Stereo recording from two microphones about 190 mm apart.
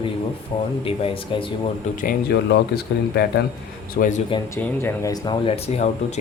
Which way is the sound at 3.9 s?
45° left (ahead or behind).